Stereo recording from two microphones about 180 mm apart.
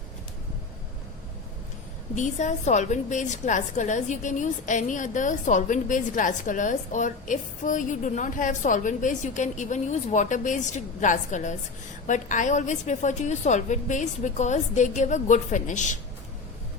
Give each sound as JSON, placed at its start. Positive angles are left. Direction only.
{"t": 2.1, "sound": "a woman's voice", "side_deg": 45}